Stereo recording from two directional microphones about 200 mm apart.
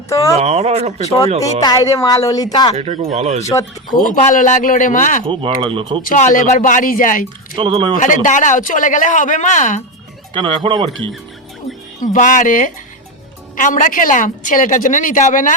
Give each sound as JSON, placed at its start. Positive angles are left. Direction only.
{"t": 0.1, "sound": "a woman's voice", "side_deg": 15}
{"t": 0.3, "sound": "speech", "side_deg": -30}
{"t": 1.6, "sound": "a woman's voice", "side_deg": 15}
{"t": 2.7, "sound": "speech", "side_deg": -30}
{"t": 3.5, "sound": "a woman's voice", "side_deg": 15}
{"t": 3.9, "sound": "a woman's voice", "side_deg": 40}
{"t": 5.2, "sound": "speech", "side_deg": -25}
{"t": 6.1, "sound": "a woman's voice", "side_deg": 40}
{"t": 7.5, "sound": "speech", "side_deg": -25}
{"t": 7.9, "sound": "a woman's voice", "side_deg": 40}
{"t": 10.3, "sound": "speech", "side_deg": -25}
{"t": 12.0, "sound": "a woman's voice", "side_deg": 40}